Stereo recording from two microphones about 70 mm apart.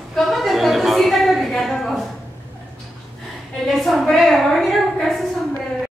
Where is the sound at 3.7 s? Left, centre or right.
Centre.